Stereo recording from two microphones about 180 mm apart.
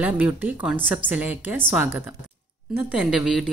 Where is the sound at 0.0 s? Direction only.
10° right (ahead or behind).